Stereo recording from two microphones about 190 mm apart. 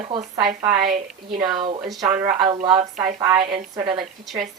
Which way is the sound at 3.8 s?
5° right (ahead or behind).